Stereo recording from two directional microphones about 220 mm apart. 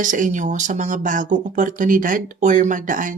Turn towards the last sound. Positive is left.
turn(degrees=-35)  # may be behind; listen again after turning